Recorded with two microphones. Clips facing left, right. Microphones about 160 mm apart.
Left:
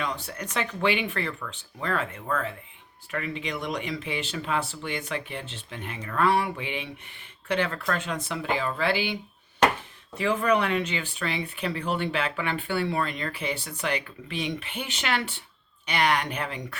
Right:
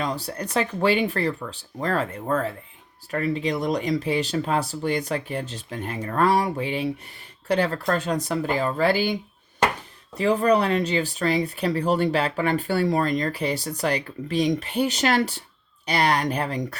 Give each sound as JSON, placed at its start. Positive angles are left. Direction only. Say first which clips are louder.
{"t": 0.0, "sound": "speech", "louder": "right 4 dB", "side_deg": -35}
{"t": 10.2, "sound": "speech", "louder": "right 4 dB", "side_deg": -35}